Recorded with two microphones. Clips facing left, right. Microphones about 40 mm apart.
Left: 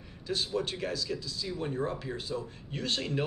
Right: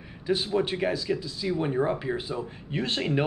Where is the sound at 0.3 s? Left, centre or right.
Right.